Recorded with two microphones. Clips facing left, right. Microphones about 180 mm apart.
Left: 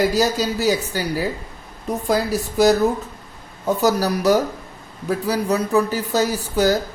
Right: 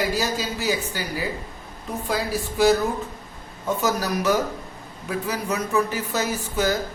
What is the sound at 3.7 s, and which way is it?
Speech, 35° left (ahead or behind).